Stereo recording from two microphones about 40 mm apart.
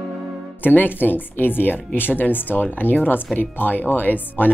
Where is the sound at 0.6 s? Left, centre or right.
Left.